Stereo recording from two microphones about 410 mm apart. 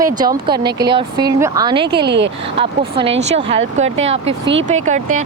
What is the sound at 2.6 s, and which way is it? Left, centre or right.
Speech, centre.